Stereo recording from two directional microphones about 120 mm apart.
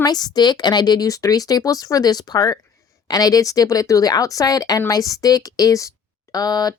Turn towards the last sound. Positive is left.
turn(degrees=35)  # may be behind; listen again after turning